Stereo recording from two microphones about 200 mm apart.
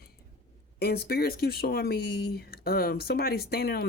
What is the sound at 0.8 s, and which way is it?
Speech, 50° left (ahead or behind).